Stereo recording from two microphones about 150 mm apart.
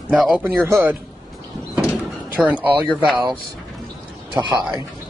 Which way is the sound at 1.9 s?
10° right (ahead or behind).